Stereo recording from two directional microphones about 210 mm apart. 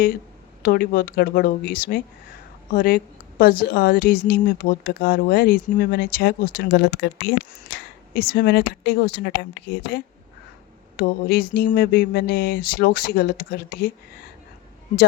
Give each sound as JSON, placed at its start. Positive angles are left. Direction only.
{"t": 0.6, "sound": "a woman's voice", "side_deg": 45}